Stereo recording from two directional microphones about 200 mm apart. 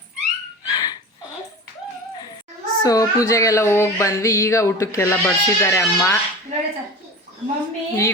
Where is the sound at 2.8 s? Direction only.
15° left (ahead or behind).